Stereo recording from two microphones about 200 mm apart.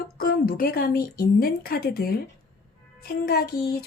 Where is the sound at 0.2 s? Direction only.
45° left (ahead or behind).